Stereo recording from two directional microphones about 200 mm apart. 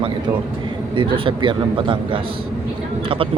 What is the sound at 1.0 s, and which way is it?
Speech, 25° right (ahead or behind).